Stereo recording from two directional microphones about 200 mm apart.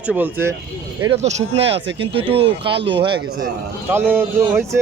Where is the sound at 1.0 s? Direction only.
30° right (ahead or behind).